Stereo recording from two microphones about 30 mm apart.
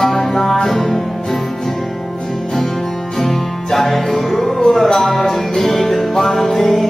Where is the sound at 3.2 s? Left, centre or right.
Centre.